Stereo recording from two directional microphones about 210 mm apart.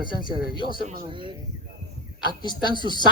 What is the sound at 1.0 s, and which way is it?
Speech, 25° right (ahead or behind).